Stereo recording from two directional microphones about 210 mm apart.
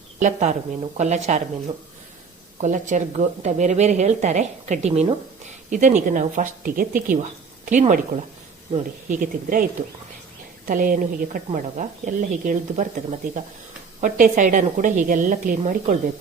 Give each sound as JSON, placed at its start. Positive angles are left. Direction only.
{"t": 0.2, "sound": "speech", "side_deg": -35}
{"t": 2.6, "sound": "speech", "side_deg": -35}
{"t": 10.7, "sound": "speech", "side_deg": -40}